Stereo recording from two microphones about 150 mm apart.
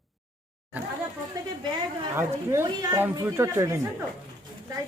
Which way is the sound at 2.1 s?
20° right (ahead or behind).